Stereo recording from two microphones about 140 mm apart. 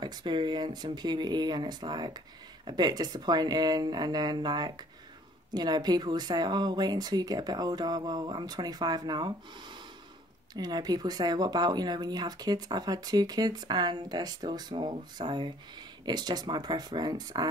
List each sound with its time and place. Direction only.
0.0 s speech: 35° right (ahead or behind)